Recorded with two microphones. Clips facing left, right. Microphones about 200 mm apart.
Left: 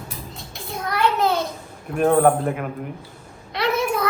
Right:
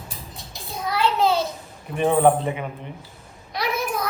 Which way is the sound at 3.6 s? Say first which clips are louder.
Left 4 dB; 25° left (ahead or behind).